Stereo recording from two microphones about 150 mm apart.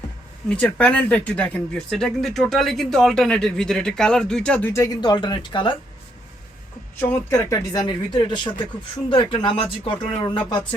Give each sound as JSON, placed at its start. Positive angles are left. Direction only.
{"t": 0.4, "sound": "speech", "side_deg": 5}
{"t": 7.1, "sound": "speech", "side_deg": 15}
{"t": 7.7, "sound": "speech", "side_deg": 30}